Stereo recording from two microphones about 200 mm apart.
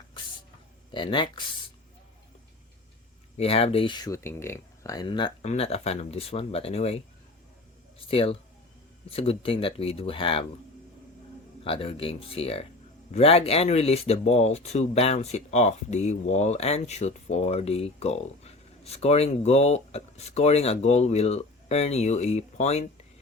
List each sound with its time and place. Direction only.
0.9 s speech: 25° left (ahead or behind)
3.3 s speech: 30° left (ahead or behind)
11.6 s speech: 30° left (ahead or behind)